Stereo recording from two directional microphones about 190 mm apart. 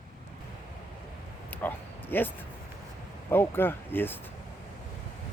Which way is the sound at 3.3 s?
10° left (ahead or behind).